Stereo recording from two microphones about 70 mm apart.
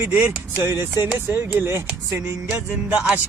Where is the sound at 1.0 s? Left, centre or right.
Right.